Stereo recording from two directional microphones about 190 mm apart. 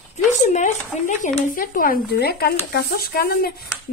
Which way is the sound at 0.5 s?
40° left (ahead or behind).